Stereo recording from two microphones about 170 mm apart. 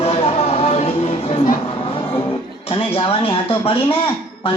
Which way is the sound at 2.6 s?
35° left (ahead or behind).